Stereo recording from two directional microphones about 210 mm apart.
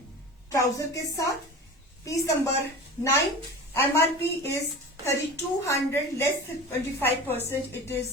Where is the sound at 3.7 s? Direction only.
10° left (ahead or behind).